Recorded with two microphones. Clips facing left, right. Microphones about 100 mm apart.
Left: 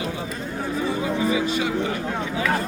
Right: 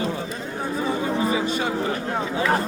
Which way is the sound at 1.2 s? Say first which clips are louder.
Left 2 dB; 35° right (ahead or behind).